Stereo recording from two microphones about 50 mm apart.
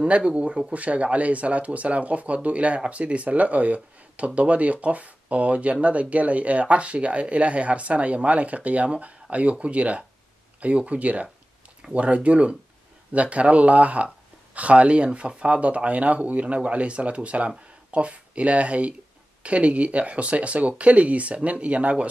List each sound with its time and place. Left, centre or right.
0.0 s speech: right